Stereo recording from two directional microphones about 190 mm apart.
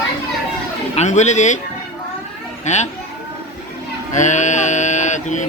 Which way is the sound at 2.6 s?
35° left (ahead or behind).